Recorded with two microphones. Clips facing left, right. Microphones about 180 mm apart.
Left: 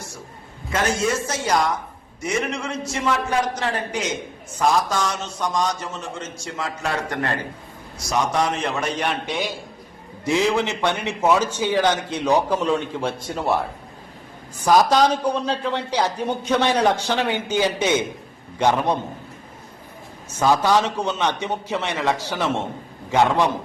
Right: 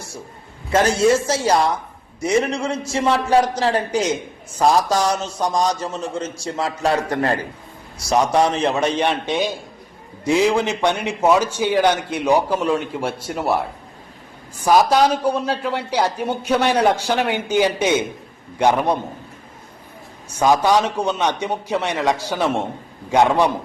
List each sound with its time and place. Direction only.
0.7 s a man's voice: 35° right (ahead or behind); by 13.6 s 10° right (ahead or behind)
14.6 s a man's voice: 10° right (ahead or behind)
20.4 s a man's voice: 15° right (ahead or behind)